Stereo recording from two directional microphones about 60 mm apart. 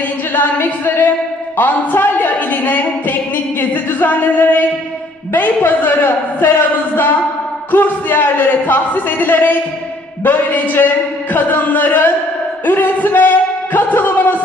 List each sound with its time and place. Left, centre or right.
0.3 s a man's voice: left
7.7 s a man's voice: left